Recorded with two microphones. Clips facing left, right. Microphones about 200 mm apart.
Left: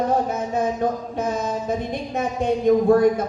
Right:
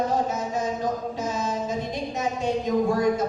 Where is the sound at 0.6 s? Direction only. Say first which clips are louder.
Left 6 dB; 55° left (ahead or behind).